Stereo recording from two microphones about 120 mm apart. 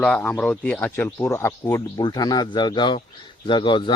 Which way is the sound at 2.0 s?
35° left (ahead or behind).